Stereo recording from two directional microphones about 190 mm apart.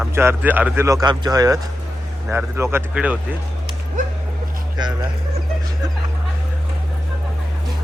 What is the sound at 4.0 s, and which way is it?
Dog, 40° right (ahead or behind).